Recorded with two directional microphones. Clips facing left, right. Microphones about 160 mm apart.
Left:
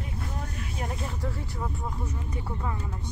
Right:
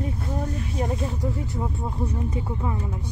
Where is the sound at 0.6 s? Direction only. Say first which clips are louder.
Right 7 dB; 30° right (ahead or behind).